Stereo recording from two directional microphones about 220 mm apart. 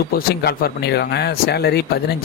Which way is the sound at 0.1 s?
45° left (ahead or behind).